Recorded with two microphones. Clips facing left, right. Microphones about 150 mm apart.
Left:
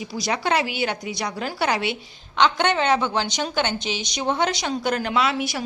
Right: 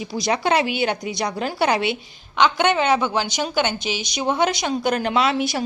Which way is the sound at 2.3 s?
10° right (ahead or behind).